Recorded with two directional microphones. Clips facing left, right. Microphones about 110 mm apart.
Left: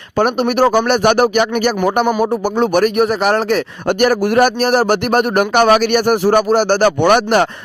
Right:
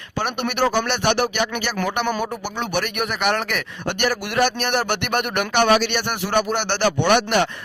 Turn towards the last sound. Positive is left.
turn(degrees=45)  # may be behind; listen again after turning